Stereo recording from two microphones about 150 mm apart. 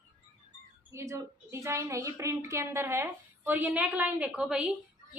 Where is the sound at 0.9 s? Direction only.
20° right (ahead or behind).